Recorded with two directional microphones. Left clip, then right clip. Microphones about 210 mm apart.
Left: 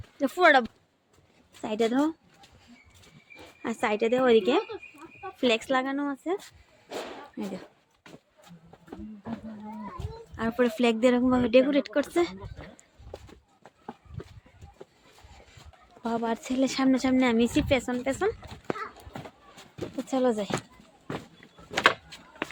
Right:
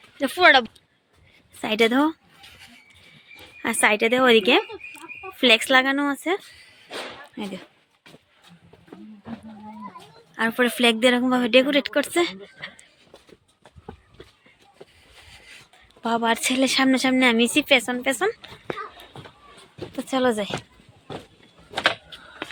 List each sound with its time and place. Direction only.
0.2 s a woman's voice: 5° left (ahead or behind)
1.6 s speech: 15° right (ahead or behind)
3.6 s speech: 10° right (ahead or behind)
7.4 s a woman's voice: 5° right (ahead or behind)
10.3 s a woman's voice: 5° right (ahead or behind)
16.0 s a woman's voice: 10° right (ahead or behind)
20.0 s speech: 10° right (ahead or behind)